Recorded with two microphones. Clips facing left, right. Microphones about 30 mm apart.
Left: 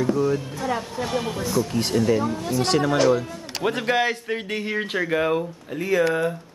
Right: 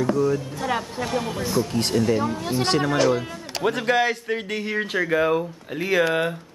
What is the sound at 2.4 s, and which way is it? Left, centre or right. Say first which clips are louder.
Speech: even; right.